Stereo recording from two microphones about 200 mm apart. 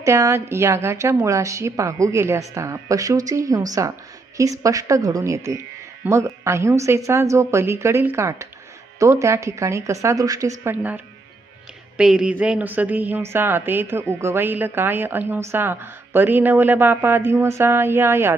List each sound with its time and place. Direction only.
0.0 s speech: 15° right (ahead or behind)